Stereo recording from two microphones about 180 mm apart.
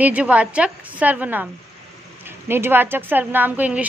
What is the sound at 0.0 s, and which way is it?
A woman's voice, 5° right (ahead or behind).